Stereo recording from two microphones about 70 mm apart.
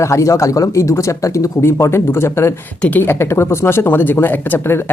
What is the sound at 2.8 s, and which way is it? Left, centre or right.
Speech, left.